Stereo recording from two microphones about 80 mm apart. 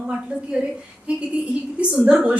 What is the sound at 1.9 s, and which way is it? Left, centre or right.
Speech, centre.